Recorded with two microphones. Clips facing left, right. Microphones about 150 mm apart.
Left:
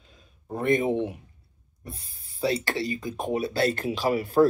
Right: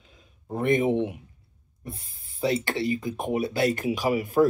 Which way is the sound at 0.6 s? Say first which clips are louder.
Right 1 dB; 20° right (ahead or behind).